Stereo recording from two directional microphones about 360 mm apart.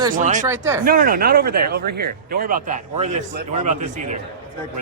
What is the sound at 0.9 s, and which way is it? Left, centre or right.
Speech, right.